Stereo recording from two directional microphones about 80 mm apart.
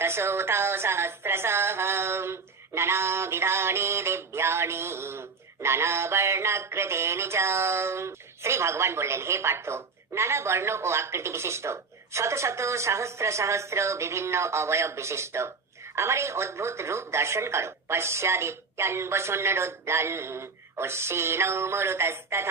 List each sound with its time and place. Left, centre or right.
0.0 s music: right